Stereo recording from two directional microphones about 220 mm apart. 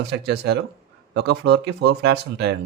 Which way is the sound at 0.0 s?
50° right (ahead or behind).